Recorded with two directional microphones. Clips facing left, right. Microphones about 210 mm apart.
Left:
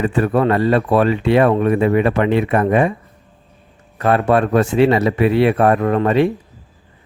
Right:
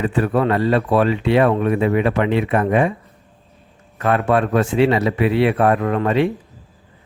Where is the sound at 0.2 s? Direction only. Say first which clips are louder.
Left 2 dB; 45° left (ahead or behind).